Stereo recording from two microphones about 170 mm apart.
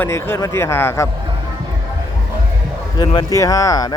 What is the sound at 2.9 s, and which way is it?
Speech, 25° left (ahead or behind).